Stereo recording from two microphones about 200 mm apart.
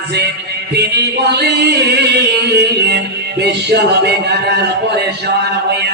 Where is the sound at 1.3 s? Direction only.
55° right (ahead or behind).